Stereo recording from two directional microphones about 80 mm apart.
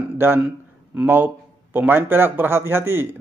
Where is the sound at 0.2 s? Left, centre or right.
Right.